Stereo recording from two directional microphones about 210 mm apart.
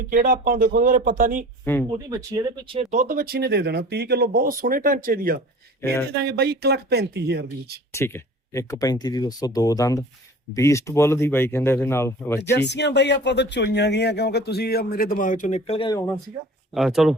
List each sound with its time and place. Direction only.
0.1 s speech: 40° right (ahead or behind)
1.7 s speech: 10° left (ahead or behind)
2.0 s speech: 20° right (ahead or behind); by 7.8 s 50° right (ahead or behind)
7.9 s speech: 10° left (ahead or behind)
12.4 s speech: 55° left (ahead or behind); by 16.0 s 20° left (ahead or behind)
16.7 s speech: centre (ahead or behind)